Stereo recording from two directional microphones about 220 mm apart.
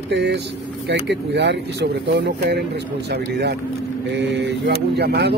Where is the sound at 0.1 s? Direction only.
50° right (ahead or behind).